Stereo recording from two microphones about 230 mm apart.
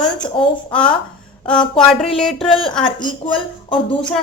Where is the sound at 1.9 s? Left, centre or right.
Centre.